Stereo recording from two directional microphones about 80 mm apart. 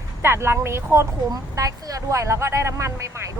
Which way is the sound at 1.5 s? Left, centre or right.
Right.